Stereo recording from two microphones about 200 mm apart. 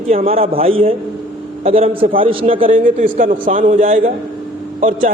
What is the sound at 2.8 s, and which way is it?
A man's voice, 40° right (ahead or behind).